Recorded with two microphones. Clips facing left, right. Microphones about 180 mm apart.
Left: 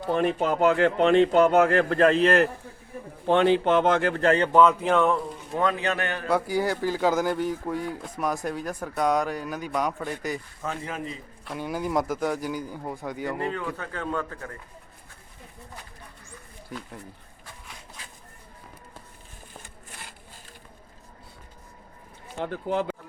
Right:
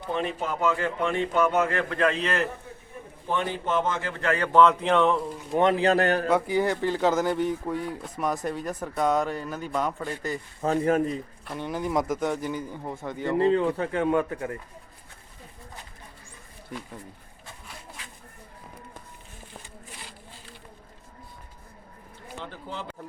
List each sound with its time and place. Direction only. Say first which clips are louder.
0.0 s speech: left 5 dB; 55° left (ahead or behind); by 1.4 s 70° left (ahead or behind)
1.5 s speech: left 5 dB; 55° left (ahead or behind)
1.8 s a man's voice: left 5 dB; 40° left (ahead or behind)
2.2 s speech: left 7 dB; 55° left (ahead or behind)
3.2 s a man's voice: left 8 dB; 75° left (ahead or behind)
4.1 s a man's voice: left 5 dB; 35° left (ahead or behind)
4.5 s speech: right 4 dB; 5° left (ahead or behind)
5.5 s a man's voice: right 5 dB; 25° right (ahead or behind)
6.5 s speech: right 1 dB; 5° left (ahead or behind)
10.8 s speech: right 11 dB; 50° right (ahead or behind)
11.4 s speech: left 1 dB; 5° left (ahead or behind)
13.3 s speech: right 8 dB; 25° right (ahead or behind)
22.4 s speech: left 12 dB; 55° left (ahead or behind)